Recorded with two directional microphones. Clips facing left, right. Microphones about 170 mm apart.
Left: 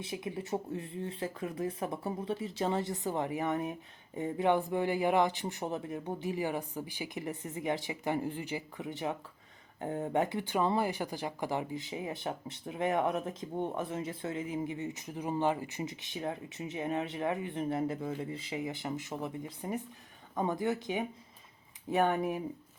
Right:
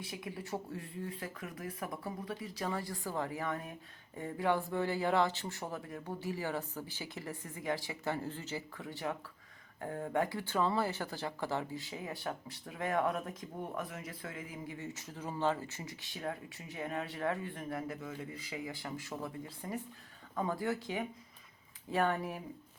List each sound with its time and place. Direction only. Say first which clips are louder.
0.0 s speech: left 5 dB; 25° left (ahead or behind)